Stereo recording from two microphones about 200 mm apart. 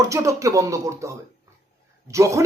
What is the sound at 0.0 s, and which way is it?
Speech, 15° right (ahead or behind).